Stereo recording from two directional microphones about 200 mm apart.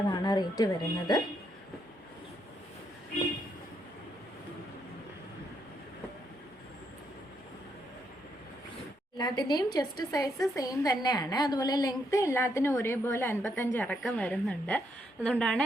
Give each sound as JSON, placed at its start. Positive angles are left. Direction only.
{"t": 0.1, "sound": "speech", "side_deg": 20}
{"t": 9.1, "sound": "a woman's voice", "side_deg": 20}